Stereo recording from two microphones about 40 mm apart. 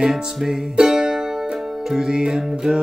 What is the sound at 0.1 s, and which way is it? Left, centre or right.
Music, centre.